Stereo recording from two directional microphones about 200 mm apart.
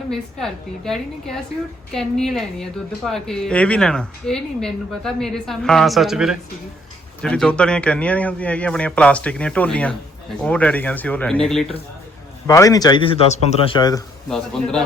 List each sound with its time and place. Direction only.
0.1 s a woman's voice: centre (ahead or behind)
12.5 s a man's voice: 15° left (ahead or behind); by 13.7 s 35° left (ahead or behind)
13.7 s a man's voice: 20° left (ahead or behind)
14.3 s a woman's voice: centre (ahead or behind)